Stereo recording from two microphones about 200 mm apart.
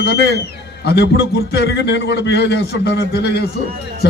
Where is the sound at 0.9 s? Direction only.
55° left (ahead or behind).